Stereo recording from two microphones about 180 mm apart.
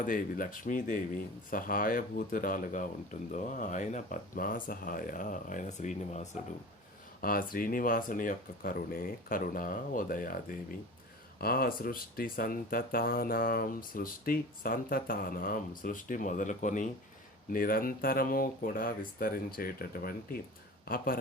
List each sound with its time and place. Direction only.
0.0 s speech: 50° left (ahead or behind)
7.2 s speech: 50° left (ahead or behind)